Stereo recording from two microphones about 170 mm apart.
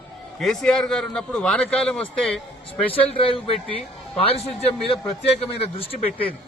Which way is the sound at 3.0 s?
30° left (ahead or behind).